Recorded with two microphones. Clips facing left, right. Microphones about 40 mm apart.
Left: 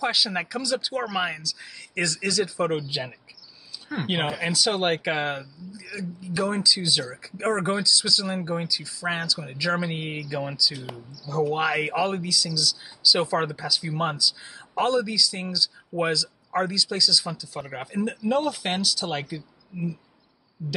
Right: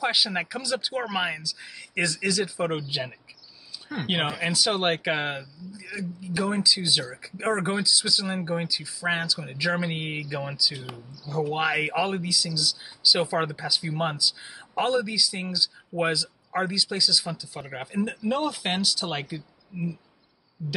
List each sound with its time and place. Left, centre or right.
0.0 s speech: centre
7.9 s speech: centre
20.6 s speech: centre